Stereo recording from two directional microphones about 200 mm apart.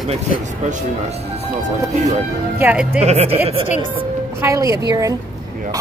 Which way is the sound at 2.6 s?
5° right (ahead or behind).